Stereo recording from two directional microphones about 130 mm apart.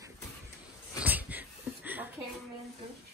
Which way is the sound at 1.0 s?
15° right (ahead or behind).